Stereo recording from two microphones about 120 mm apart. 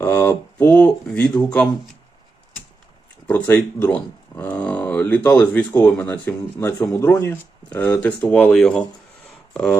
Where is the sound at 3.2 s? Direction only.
15° left (ahead or behind).